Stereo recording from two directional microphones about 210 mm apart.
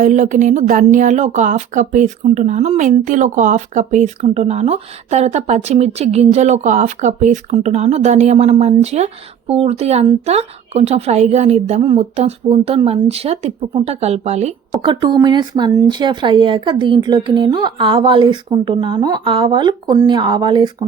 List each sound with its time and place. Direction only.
0.0 s a woman's voice: 35° right (ahead or behind)
14.7 s a woman's voice: 20° right (ahead or behind)